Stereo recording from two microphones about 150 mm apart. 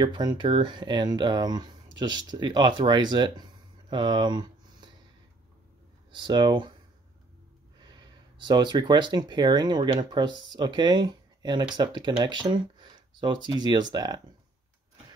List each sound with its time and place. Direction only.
0.0 s speech: 30° right (ahead or behind)
3.9 s a sound: 30° right (ahead or behind)
6.1 s speech: 30° right (ahead or behind)
7.8 s speech: 30° right (ahead or behind)